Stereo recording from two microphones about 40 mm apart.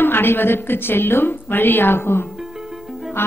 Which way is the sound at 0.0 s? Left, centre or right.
Left.